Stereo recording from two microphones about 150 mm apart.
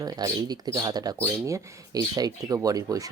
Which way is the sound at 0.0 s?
25° right (ahead or behind).